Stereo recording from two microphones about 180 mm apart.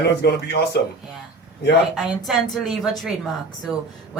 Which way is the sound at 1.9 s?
Centre (ahead or behind).